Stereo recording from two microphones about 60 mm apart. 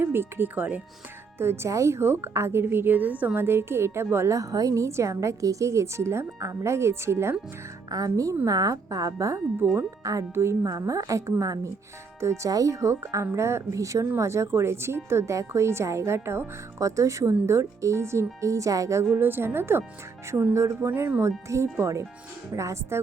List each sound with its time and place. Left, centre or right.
0.0 s a woman's voice: right
1.4 s a woman's voice: right
1.7 s a woman's voice: right
3.3 s speech: right
4.4 s a woman's voice: right
7.9 s a woman's voice: right
10.3 s speech: right
10.6 s a woman's voice: right
12.2 s speech: right
12.5 s a woman's voice: right
19.1 s a woman's voice: right
20.8 s a woman's voice: right